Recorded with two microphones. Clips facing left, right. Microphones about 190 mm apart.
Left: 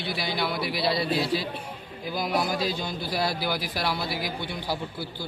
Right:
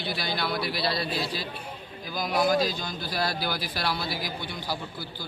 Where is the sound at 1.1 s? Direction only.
25° left (ahead or behind).